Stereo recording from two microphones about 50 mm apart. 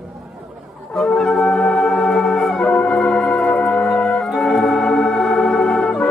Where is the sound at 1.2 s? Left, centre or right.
Centre.